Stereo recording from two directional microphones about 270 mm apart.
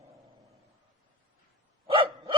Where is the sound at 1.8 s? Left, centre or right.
Centre.